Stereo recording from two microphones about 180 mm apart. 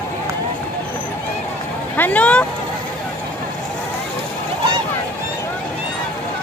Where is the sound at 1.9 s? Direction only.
10° left (ahead or behind).